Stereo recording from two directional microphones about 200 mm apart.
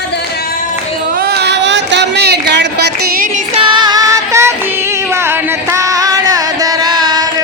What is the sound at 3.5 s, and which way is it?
Music, 25° right (ahead or behind).